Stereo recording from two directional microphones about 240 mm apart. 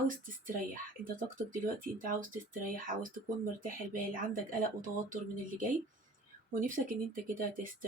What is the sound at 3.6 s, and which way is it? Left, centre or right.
Speech, right.